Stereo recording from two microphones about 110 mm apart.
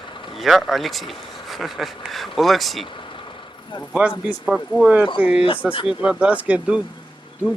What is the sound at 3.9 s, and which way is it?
Speech, 10° right (ahead or behind).